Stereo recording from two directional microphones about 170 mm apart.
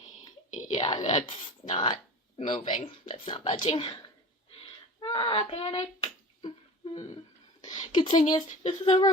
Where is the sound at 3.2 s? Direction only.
30° left (ahead or behind).